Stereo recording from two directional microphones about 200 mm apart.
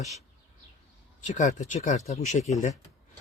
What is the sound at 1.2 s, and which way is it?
Speech, 40° left (ahead or behind).